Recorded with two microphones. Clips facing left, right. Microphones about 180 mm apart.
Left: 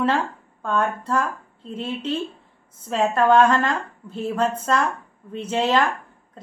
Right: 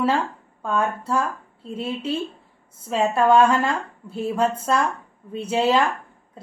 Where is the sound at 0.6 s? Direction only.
10° right (ahead or behind).